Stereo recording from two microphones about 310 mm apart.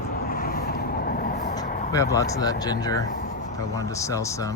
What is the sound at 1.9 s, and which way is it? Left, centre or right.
Speech, centre.